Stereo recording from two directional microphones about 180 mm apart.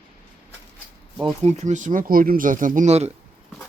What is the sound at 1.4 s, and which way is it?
Speech, 40° right (ahead or behind).